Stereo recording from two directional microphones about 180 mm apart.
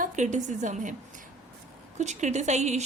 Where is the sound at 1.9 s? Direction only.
40° right (ahead or behind).